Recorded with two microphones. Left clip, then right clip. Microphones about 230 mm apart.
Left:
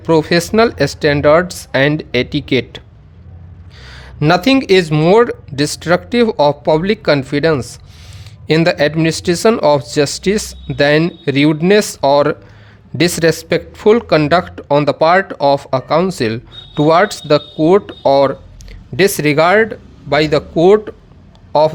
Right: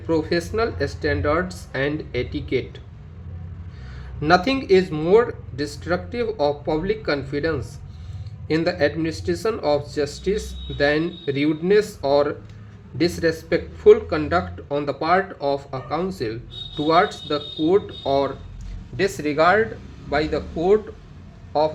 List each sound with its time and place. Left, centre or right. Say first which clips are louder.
0.0 s speech: left 10 dB; left
4.2 s speech: left 6 dB; left